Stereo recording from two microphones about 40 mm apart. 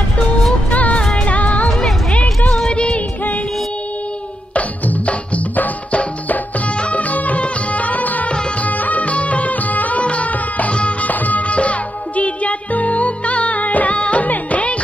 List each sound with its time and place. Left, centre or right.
0.7 s music: left
2.5 s music: left
4.6 s music: left